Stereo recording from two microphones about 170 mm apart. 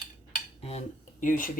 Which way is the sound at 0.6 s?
35° left (ahead or behind).